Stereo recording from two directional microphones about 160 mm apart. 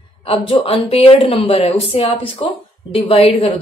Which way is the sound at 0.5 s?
35° left (ahead or behind).